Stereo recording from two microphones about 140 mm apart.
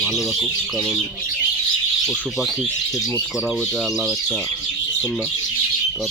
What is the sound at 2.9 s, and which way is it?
Speech, 20° left (ahead or behind).